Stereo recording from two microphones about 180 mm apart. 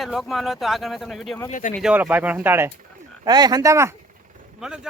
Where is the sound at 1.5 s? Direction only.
45° left (ahead or behind).